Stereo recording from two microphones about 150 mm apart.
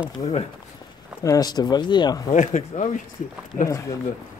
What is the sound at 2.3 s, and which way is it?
Speech, 55° left (ahead or behind).